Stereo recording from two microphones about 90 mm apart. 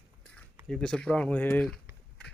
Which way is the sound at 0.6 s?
5° left (ahead or behind).